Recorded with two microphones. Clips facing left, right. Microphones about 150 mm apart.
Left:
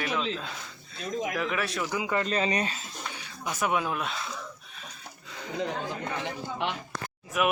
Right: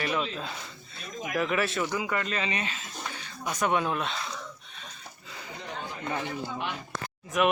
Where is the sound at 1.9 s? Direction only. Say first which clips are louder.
Even; 15° left (ahead or behind).